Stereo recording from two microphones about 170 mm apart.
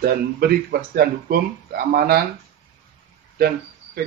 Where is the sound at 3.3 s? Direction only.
65° right (ahead or behind).